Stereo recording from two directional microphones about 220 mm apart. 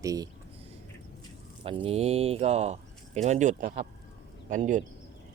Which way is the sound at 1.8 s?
30° right (ahead or behind).